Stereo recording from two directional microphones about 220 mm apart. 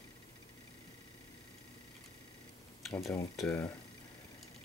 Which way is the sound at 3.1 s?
5° left (ahead or behind).